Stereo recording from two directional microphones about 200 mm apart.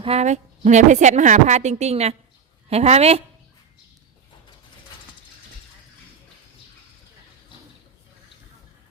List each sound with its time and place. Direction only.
0.0 s a woman's voice: 30° right (ahead or behind)